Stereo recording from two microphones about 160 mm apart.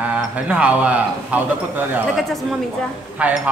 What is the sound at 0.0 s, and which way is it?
A man's voice, 10° right (ahead or behind).